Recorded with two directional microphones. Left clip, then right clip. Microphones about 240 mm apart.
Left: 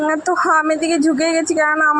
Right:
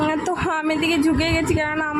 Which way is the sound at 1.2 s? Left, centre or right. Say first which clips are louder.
Left 4 dB; left.